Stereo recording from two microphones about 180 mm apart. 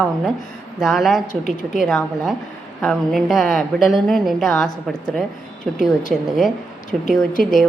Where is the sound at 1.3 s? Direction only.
45° left (ahead or behind).